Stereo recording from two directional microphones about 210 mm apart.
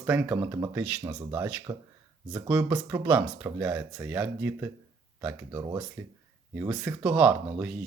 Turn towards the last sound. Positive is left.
turn(degrees=-5)  # may be behind; listen again after turning